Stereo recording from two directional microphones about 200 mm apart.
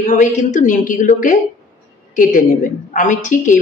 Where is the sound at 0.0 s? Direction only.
40° left (ahead or behind).